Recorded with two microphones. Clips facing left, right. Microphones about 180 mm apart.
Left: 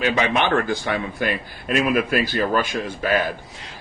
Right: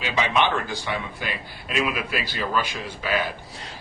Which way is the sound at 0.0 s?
55° left (ahead or behind).